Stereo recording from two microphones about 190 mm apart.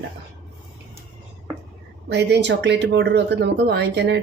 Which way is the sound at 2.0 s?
60° right (ahead or behind).